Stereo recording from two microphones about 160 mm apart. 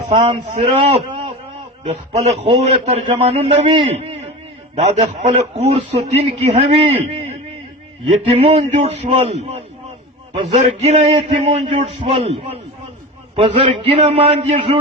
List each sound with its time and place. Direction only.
0.1 s a man's voice: 40° right (ahead or behind)